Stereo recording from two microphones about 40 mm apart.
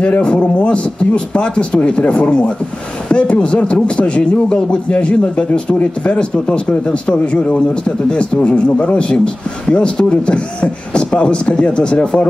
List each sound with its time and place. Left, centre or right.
0.0 s a man's voice: left